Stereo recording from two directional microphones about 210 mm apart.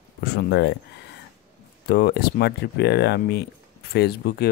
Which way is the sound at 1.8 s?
50° left (ahead or behind).